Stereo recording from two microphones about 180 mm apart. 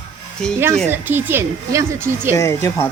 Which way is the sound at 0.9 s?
10° right (ahead or behind).